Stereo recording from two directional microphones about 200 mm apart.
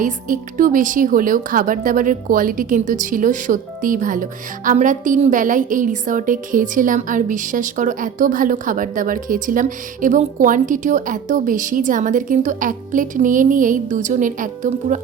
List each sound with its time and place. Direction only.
0.0 s a woman's voice: 40° right (ahead or behind)